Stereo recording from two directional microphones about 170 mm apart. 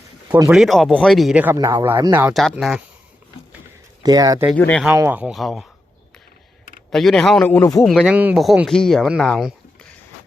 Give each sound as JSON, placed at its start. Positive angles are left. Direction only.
{"t": 0.5, "sound": "speech", "side_deg": 0}
{"t": 1.5, "sound": "speech", "side_deg": -20}
{"t": 2.2, "sound": "speech", "side_deg": 0}
{"t": 4.0, "sound": "speech", "side_deg": -20}
{"t": 4.5, "sound": "speech", "side_deg": 10}
{"t": 4.9, "sound": "speech", "side_deg": -10}
{"t": 6.9, "sound": "speech", "side_deg": 0}
{"t": 7.9, "sound": "speech", "side_deg": -5}